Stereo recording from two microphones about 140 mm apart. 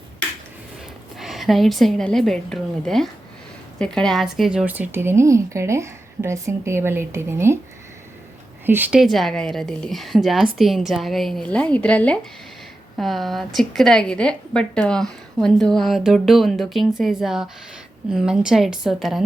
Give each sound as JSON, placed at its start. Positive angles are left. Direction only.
{"t": 1.2, "sound": "a woman's voice", "side_deg": 0}
{"t": 8.6, "sound": "a woman's voice", "side_deg": -15}
{"t": 9.0, "sound": "a woman's voice", "side_deg": 0}